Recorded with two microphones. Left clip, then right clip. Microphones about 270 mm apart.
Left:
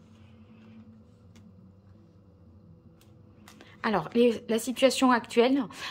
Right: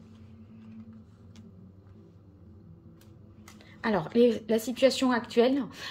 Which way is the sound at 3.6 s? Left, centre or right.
Centre.